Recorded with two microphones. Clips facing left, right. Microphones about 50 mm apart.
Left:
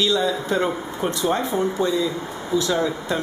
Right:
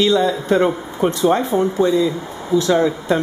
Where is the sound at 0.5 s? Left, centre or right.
Centre.